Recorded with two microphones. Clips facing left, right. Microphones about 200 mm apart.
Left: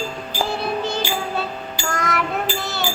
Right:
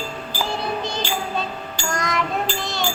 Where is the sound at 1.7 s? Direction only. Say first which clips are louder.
Even; 5° left (ahead or behind).